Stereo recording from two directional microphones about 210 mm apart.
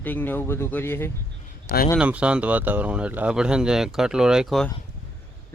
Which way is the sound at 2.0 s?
5° right (ahead or behind).